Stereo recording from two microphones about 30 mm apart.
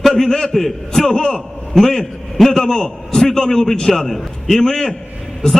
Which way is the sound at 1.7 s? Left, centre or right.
Centre.